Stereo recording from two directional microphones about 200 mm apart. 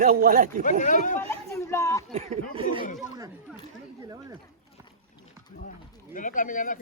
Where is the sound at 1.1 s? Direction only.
15° left (ahead or behind).